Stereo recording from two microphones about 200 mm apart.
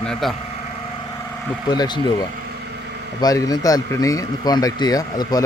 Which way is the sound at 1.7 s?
20° left (ahead or behind).